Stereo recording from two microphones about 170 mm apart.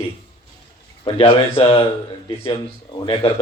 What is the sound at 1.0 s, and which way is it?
Speech, 30° left (ahead or behind).